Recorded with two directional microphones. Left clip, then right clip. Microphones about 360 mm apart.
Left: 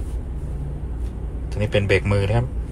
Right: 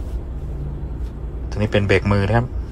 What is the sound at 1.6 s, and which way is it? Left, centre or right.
Speech, centre.